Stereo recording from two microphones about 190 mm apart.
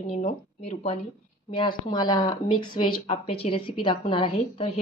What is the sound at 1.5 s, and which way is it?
A woman's voice, 25° left (ahead or behind).